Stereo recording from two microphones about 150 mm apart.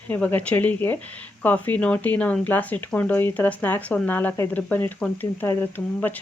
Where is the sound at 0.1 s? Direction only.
10° left (ahead or behind).